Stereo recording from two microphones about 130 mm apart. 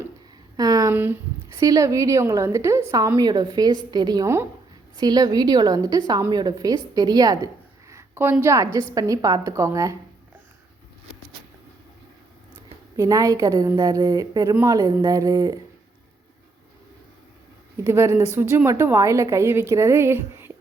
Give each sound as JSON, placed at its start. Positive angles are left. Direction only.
{"t": 0.5, "sound": "a sound", "side_deg": -30}
{"t": 0.9, "sound": "speech", "side_deg": -15}
{"t": 1.5, "sound": "a woman's voice", "side_deg": -25}
{"t": 13.0, "sound": "a woman's voice", "side_deg": -25}
{"t": 17.8, "sound": "a woman's voice", "side_deg": -20}